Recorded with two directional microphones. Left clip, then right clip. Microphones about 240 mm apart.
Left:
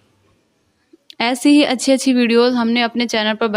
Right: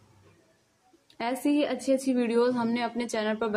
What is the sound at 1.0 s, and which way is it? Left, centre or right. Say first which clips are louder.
Speech: left 13 dB; left.